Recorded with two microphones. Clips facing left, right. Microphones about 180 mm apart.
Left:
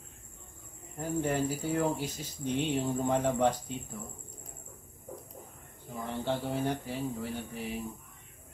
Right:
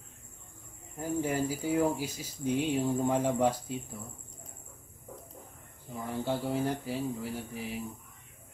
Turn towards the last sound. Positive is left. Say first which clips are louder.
# even
turn(degrees=-5)  # may be behind; listen again after turning